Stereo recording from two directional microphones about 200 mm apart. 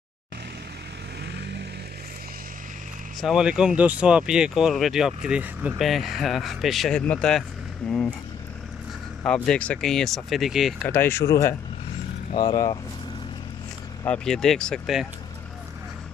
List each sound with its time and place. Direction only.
1.2 s vehicle: 55° right (ahead or behind)
3.2 s speech: centre (ahead or behind)
9.2 s speech: 5° left (ahead or behind)
10.8 s speech: 10° left (ahead or behind)
14.0 s speech: 5° left (ahead or behind)